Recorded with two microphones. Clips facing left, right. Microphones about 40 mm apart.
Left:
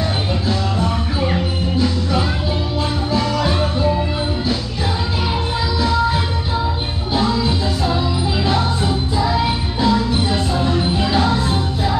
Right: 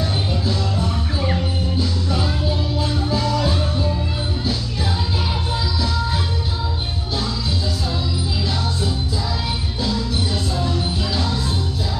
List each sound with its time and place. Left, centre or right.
0.5 s music: left
5.8 s music: left